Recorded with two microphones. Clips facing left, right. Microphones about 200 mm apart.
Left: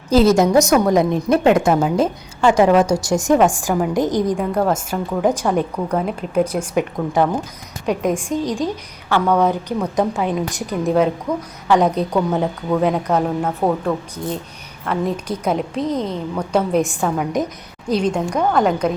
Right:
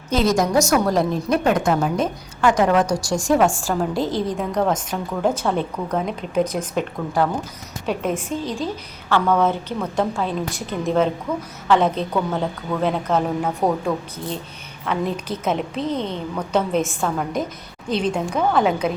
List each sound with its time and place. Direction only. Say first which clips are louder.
0.1 s a woman's voice: left 6 dB; 30° left (ahead or behind)
4.4 s a woman's voice: left 2 dB; 5° left (ahead or behind)
10.8 s a woman's voice: left 3 dB; centre (ahead or behind)
11.7 s a woman's voice: left 2 dB; 15° left (ahead or behind)
13.4 s a woman's voice: left 2 dB; 5° right (ahead or behind)
14.8 s a woman's voice: left 2 dB; 5° left (ahead or behind)